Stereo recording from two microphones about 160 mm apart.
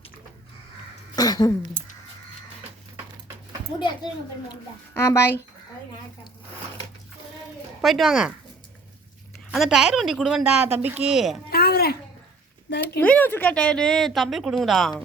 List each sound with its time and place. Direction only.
1.1 s a sound: 25° left (ahead or behind)
4.9 s speech: 15° left (ahead or behind)
7.8 s a woman's voice: centre (ahead or behind)
9.5 s a woman's voice: 5° right (ahead or behind)
11.5 s a sound: 70° left (ahead or behind)
12.7 s speech: 90° left
13.0 s a woman's voice: 10° left (ahead or behind)